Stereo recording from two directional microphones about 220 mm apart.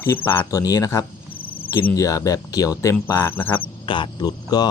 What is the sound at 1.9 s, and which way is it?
Speech, 15° left (ahead or behind).